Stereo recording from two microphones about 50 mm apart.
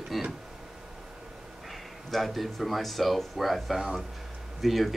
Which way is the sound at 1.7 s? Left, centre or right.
Centre.